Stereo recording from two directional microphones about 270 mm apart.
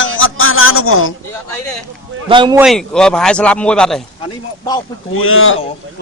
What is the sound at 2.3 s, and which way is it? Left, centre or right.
Speech, centre.